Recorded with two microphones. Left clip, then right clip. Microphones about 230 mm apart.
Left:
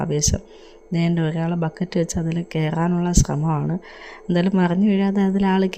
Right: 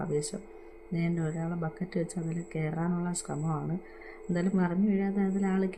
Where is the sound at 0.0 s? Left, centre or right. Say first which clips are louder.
Left 9 dB; left.